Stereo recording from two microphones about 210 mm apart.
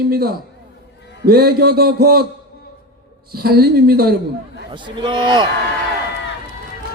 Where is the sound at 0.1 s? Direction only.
45° right (ahead or behind).